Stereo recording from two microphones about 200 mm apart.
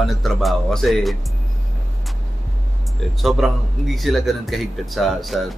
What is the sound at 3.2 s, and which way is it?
A man's voice, centre (ahead or behind).